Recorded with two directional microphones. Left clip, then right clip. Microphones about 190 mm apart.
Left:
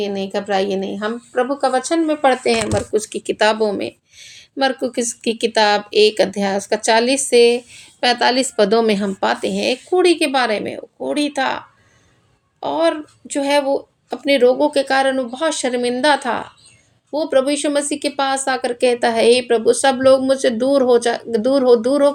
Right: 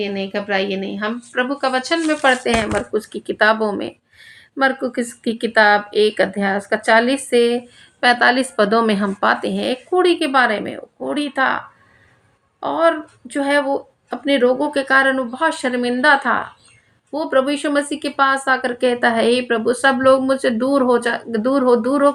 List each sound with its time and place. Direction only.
0.0 s a woman's voice: 40° left (ahead or behind)